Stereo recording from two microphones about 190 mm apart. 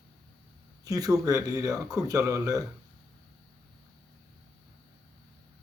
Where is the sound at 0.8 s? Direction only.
20° right (ahead or behind).